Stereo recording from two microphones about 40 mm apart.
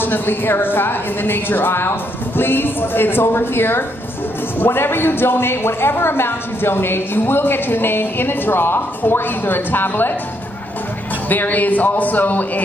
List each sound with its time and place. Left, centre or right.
0.0 s a woman's voice: left
11.2 s speech: left